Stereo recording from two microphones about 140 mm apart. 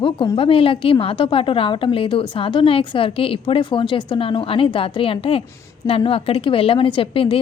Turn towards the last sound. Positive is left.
turn(degrees=40)  # may be behind; listen again after turning